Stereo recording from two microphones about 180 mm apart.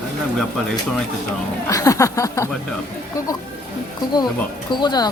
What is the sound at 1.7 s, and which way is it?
Speech, 20° left (ahead or behind).